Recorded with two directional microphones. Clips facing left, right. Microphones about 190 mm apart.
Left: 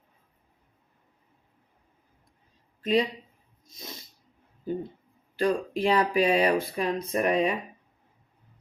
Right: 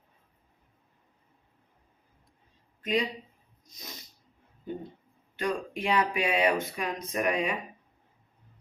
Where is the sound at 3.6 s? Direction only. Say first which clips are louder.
Left 4 dB; 25° left (ahead or behind).